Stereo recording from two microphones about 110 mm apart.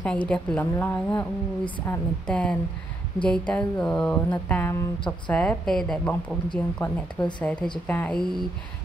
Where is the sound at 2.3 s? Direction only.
10° left (ahead or behind).